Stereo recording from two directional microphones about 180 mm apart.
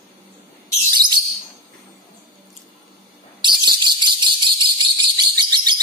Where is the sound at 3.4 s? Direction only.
25° right (ahead or behind).